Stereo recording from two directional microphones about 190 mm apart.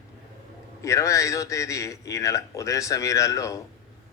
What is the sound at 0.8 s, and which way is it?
A man's voice, 15° left (ahead or behind).